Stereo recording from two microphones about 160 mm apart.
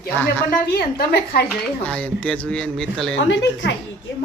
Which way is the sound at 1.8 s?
10° left (ahead or behind).